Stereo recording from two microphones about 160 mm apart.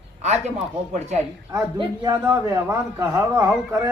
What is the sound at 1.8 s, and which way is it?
A man's voice, 25° right (ahead or behind).